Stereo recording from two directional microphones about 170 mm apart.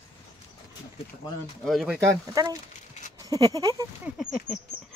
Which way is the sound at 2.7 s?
45° left (ahead or behind).